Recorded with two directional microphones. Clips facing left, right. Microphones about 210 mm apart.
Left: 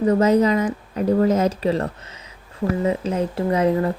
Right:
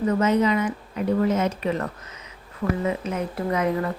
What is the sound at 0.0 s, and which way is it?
Speech, 35° left (ahead or behind).